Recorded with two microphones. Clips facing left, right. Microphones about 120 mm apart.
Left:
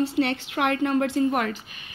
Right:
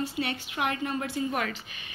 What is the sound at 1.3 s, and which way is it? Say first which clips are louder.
Speech: left 5 dB; 45° left (ahead or behind).